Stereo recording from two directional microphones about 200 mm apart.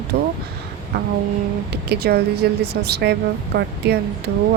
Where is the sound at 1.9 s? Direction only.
50° right (ahead or behind).